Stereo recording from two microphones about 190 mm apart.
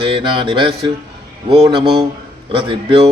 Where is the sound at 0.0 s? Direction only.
25° right (ahead or behind).